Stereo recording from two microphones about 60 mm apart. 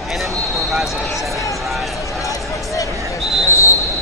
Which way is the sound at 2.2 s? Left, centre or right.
Left.